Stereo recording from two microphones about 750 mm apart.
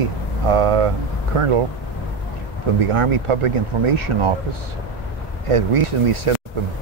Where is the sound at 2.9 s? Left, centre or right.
Right.